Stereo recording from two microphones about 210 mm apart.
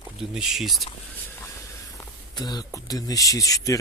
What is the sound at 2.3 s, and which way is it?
Speech, 20° left (ahead or behind).